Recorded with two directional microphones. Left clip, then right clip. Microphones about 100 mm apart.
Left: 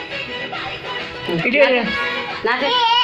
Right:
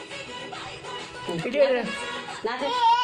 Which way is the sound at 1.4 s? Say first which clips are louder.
Left 7 dB; 10° right (ahead or behind).